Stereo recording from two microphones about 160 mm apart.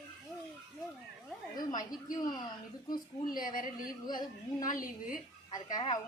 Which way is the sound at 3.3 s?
60° left (ahead or behind).